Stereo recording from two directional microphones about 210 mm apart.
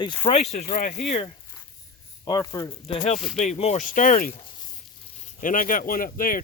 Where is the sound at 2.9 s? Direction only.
30° left (ahead or behind).